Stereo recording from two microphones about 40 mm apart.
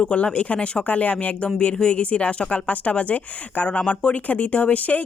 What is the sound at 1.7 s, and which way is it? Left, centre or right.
Speech, left.